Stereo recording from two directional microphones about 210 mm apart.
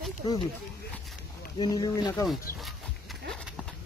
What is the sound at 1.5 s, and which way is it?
Speech, 15° left (ahead or behind).